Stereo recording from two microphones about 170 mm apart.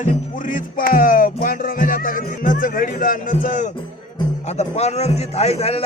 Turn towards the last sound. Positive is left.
turn(degrees=35)  # may be behind; listen again after turning